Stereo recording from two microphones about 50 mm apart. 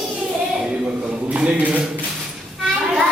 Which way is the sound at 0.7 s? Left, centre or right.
Right.